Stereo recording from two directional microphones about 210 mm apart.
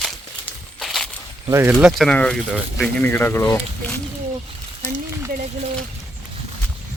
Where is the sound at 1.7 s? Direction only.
Centre (ahead or behind).